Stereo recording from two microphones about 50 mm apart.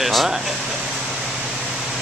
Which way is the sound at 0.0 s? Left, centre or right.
Centre.